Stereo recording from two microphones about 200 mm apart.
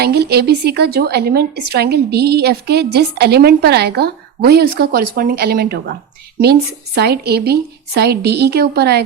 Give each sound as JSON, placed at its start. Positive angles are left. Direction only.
{"t": 0.0, "sound": "a woman's voice", "side_deg": -55}